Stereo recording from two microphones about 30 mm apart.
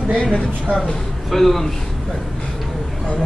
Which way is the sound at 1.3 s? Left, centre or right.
Centre.